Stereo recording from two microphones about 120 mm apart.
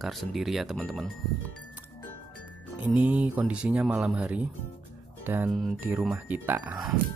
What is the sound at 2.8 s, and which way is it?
Speech, 10° right (ahead or behind).